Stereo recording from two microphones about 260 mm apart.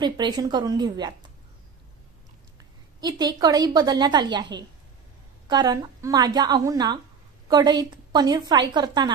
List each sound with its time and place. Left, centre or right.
0.0 s a woman's voice: centre
3.0 s a woman's voice: centre